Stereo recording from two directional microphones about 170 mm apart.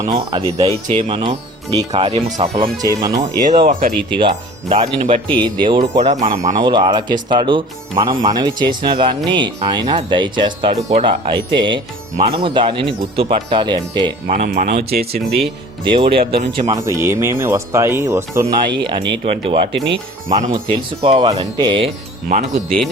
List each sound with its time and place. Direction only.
0.1 s speech: 25° right (ahead or behind)
1.9 s speech: 35° right (ahead or behind)
3.7 s speech: 50° right (ahead or behind)
4.7 s speech: 35° right (ahead or behind)
10.8 s speech: 40° right (ahead or behind)
14.3 s speech: 45° right (ahead or behind)
14.8 s speech: 65° right (ahead or behind)
15.4 s speech: 30° right (ahead or behind)
16.7 s speech: 20° right (ahead or behind)
18.7 s speech: 30° right (ahead or behind)
19.7 s speech: 90° right
20.5 s speech: 30° right (ahead or behind)
22.3 s speech: 45° right (ahead or behind)